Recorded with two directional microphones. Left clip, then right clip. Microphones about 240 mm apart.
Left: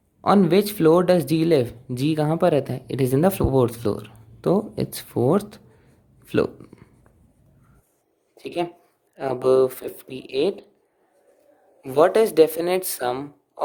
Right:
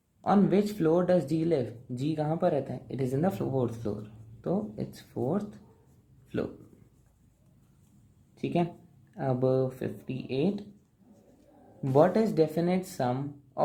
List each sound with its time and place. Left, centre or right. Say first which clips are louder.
0.2 s speech: left 8 dB; left
9.1 s speech: left 9 dB; left
11.8 s speech: left 7 dB; left